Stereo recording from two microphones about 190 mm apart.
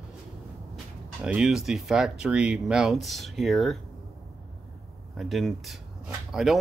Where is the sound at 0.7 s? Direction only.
5° right (ahead or behind).